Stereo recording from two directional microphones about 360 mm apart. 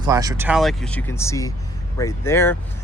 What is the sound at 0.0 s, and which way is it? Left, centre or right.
Speech, centre.